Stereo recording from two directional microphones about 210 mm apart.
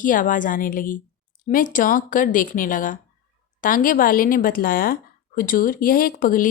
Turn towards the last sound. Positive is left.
turn(degrees=40)  # may be behind; listen again after turning